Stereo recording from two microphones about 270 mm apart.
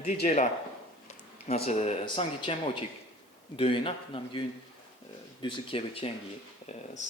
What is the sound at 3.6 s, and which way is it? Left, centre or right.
Speech, centre.